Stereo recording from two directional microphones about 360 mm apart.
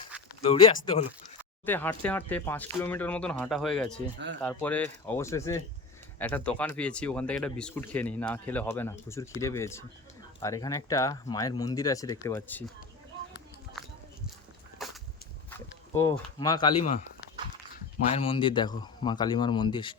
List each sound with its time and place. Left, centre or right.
0.4 s speech: centre
14.8 s whip: centre
15.4 s speech: centre
18.1 s speech: centre